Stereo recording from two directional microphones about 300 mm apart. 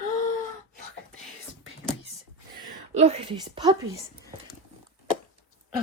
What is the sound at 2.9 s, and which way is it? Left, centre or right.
Speech, right.